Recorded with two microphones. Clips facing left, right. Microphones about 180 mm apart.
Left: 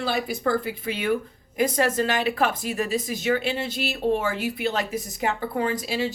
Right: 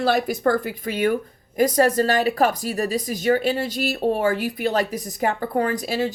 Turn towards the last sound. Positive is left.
turn(degrees=-45)  # may be behind; listen again after turning